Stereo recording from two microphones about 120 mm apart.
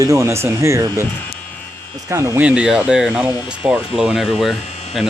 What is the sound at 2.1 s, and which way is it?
Speech, 20° right (ahead or behind).